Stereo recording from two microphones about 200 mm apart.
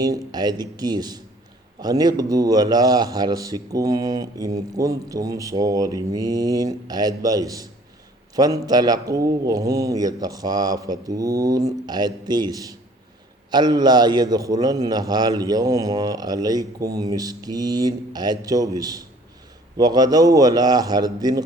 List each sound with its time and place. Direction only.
0.0 s a man's voice: 20° right (ahead or behind)